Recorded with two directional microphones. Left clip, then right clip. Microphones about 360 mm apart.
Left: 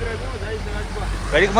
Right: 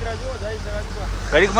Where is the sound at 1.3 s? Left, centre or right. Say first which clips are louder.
Even; centre.